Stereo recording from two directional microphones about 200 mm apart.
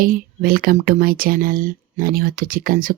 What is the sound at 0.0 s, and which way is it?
Speech, 45° right (ahead or behind).